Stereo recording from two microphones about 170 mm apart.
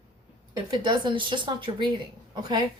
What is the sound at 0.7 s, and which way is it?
A woman's voice, 30° right (ahead or behind).